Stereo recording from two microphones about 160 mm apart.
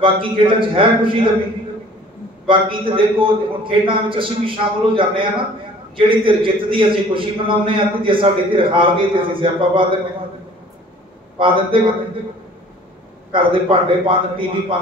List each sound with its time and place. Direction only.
0.0 s a man's voice: 30° right (ahead or behind)
2.4 s a man's voice: 30° right (ahead or behind)
11.3 s a man's voice: 30° right (ahead or behind)
13.3 s a man's voice: 30° right (ahead or behind)